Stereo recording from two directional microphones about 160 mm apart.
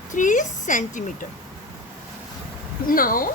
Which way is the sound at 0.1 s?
55° left (ahead or behind).